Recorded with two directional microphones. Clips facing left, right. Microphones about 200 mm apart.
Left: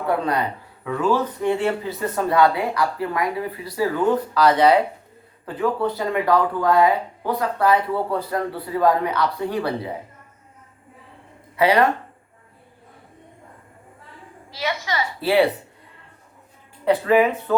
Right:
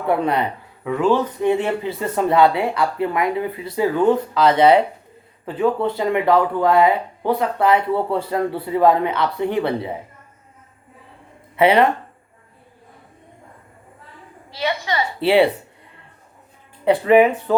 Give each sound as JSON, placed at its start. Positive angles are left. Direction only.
{"t": 0.1, "sound": "speech", "side_deg": -25}
{"t": 11.5, "sound": "speech", "side_deg": -25}
{"t": 14.5, "sound": "speech", "side_deg": -25}
{"t": 16.8, "sound": "speech", "side_deg": -25}